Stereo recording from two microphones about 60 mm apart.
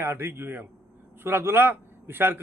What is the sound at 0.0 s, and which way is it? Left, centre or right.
Speech, right.